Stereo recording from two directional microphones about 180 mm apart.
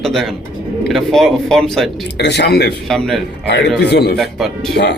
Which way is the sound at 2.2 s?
65° left (ahead or behind).